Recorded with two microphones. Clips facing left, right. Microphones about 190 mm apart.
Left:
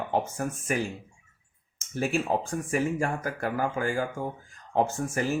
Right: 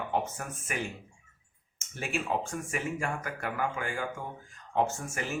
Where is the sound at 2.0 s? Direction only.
35° left (ahead or behind).